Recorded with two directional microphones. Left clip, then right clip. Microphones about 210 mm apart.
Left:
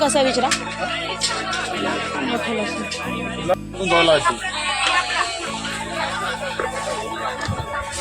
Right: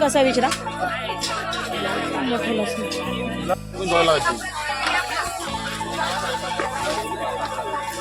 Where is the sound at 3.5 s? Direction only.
35° left (ahead or behind).